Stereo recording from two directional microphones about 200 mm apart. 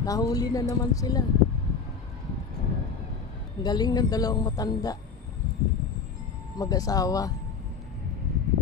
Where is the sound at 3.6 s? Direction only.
20° left (ahead or behind).